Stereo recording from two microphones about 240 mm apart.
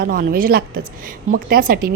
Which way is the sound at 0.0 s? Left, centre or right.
Right.